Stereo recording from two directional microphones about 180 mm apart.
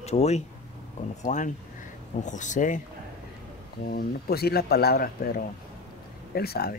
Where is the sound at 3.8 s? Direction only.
55° left (ahead or behind).